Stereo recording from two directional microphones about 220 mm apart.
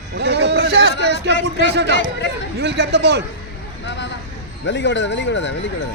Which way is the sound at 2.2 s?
55° left (ahead or behind).